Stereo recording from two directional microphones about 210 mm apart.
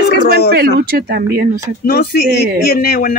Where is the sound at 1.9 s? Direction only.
45° left (ahead or behind).